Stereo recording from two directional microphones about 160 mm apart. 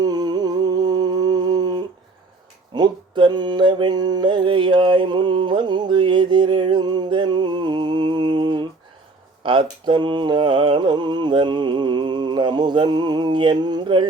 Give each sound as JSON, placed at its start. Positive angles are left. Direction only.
{"t": 0.0, "sound": "humming", "side_deg": -25}
{"t": 2.7, "sound": "mantra", "side_deg": -30}
{"t": 9.4, "sound": "music", "side_deg": -30}